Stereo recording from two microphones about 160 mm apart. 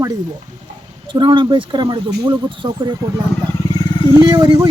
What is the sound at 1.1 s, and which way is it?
Speech, 30° right (ahead or behind).